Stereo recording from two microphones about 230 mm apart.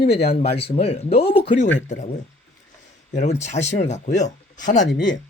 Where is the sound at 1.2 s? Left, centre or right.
Left.